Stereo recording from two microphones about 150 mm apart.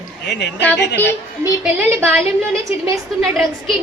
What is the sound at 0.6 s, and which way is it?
Speech, 10° left (ahead or behind).